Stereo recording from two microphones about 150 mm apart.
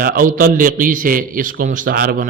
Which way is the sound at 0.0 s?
70° right (ahead or behind).